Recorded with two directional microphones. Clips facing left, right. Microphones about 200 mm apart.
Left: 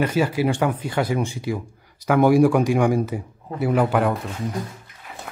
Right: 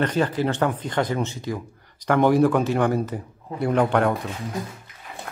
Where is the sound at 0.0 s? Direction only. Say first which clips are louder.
Left 2 dB; 10° left (ahead or behind).